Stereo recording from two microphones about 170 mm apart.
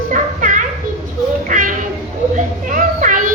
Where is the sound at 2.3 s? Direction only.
50° right (ahead or behind).